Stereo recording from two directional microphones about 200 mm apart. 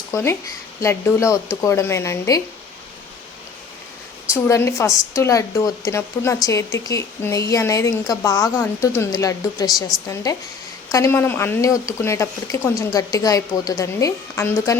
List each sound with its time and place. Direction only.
0.1 s a woman's voice: 15° left (ahead or behind)
4.3 s a woman's voice: 15° left (ahead or behind)
10.9 s a woman's voice: 15° left (ahead or behind)